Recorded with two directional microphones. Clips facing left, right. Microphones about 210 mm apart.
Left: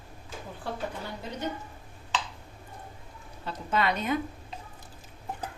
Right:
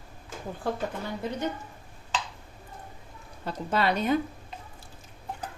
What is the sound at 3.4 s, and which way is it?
Speech, 35° right (ahead or behind).